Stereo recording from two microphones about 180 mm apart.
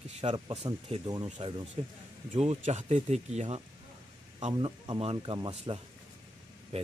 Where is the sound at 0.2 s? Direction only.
30° right (ahead or behind).